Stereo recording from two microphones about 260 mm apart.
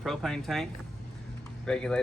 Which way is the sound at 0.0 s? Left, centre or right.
Centre.